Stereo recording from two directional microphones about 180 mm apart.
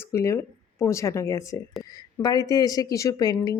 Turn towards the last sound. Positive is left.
turn(degrees=20)  # may be behind; listen again after turning